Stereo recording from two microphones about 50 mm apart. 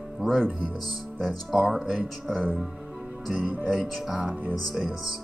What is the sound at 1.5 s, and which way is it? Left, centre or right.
Speech, centre.